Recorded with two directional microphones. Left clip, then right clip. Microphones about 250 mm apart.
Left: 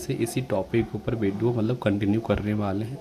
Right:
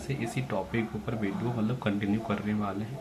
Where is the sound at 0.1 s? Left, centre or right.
Left.